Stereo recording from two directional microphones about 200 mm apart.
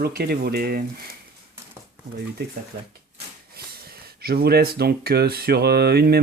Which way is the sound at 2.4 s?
55° right (ahead or behind).